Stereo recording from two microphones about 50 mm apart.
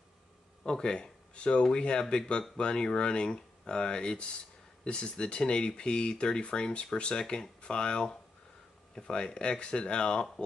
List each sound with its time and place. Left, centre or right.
0.7 s speech: centre